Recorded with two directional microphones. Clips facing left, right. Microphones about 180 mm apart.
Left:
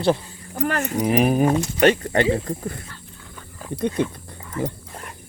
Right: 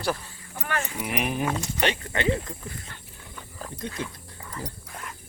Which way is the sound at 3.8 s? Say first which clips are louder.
Left 12 dB; 65° left (ahead or behind).